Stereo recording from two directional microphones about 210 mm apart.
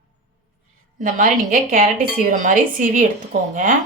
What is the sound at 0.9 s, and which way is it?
A woman's voice, 40° right (ahead or behind).